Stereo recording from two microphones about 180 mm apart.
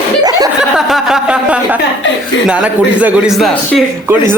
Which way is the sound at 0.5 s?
5° right (ahead or behind).